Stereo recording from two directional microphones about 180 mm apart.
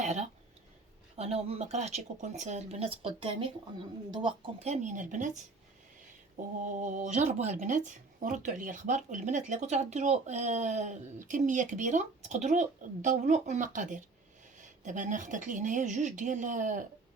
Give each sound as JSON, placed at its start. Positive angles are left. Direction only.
{"t": 0.0, "sound": "speech", "side_deg": -40}
{"t": 6.7, "sound": "speech", "side_deg": -45}